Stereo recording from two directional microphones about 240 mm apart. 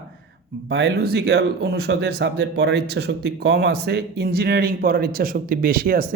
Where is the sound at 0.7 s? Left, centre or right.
Right.